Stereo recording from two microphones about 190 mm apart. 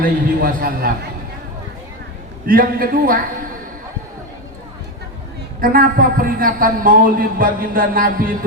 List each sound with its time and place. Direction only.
0.0 s a man's voice: 50° right (ahead or behind)
2.5 s a man's voice: 50° right (ahead or behind)
5.5 s a man's voice: 50° right (ahead or behind)